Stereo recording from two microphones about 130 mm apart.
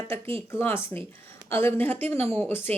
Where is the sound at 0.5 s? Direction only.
20° left (ahead or behind).